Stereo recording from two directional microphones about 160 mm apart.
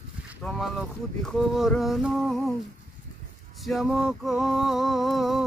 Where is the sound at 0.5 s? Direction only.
Centre (ahead or behind).